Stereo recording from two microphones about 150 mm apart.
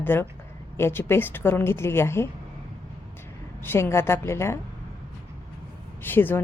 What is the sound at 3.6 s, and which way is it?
Speech, 15° left (ahead or behind).